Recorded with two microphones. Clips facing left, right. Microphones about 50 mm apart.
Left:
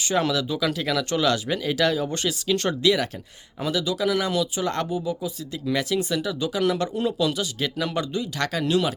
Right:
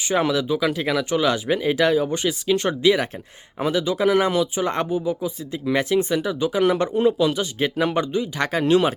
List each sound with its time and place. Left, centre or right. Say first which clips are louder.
0.0 s speech: right 2 dB; centre